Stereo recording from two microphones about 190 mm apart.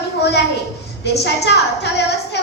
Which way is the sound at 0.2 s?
60° left (ahead or behind).